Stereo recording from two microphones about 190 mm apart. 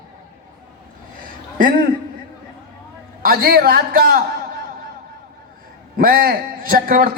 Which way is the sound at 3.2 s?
50° right (ahead or behind).